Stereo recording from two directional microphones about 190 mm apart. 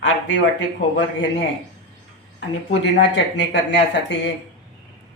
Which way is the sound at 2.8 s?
70° left (ahead or behind).